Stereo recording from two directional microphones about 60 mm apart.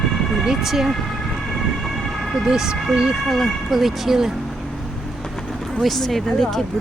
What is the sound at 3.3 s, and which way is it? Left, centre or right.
Speech, centre.